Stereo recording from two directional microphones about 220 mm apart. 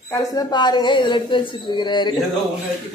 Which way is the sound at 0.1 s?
15° left (ahead or behind).